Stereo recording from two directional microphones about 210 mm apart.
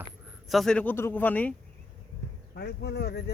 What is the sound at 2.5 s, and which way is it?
Speech, 50° left (ahead or behind).